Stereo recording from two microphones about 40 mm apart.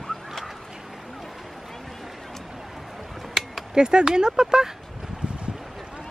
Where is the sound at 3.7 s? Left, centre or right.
Centre.